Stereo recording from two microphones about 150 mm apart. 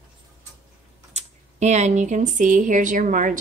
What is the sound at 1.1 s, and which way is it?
Speech, 50° right (ahead or behind).